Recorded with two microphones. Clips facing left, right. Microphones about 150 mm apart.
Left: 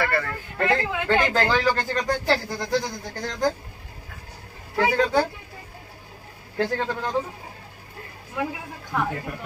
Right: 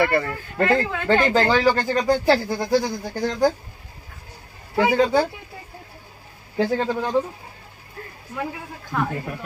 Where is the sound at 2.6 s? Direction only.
10° right (ahead or behind).